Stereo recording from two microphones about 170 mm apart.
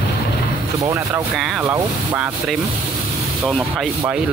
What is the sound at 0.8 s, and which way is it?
Speech, 20° right (ahead or behind).